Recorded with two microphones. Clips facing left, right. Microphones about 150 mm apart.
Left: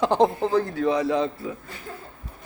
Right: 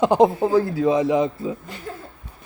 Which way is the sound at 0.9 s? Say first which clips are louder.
Right 3 dB; 20° right (ahead or behind).